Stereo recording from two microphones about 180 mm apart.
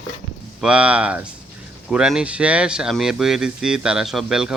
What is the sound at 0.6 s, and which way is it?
Speech, 5° right (ahead or behind).